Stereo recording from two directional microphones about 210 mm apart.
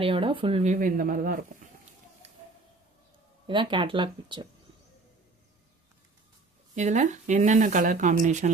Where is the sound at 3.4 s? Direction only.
25° right (ahead or behind).